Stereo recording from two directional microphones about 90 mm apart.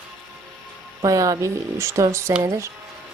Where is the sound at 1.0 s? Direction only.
40° right (ahead or behind).